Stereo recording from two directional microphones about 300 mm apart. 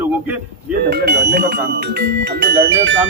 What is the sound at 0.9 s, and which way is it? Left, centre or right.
Speech, right.